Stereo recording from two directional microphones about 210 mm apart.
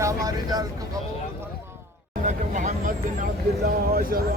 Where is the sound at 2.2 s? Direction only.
35° right (ahead or behind).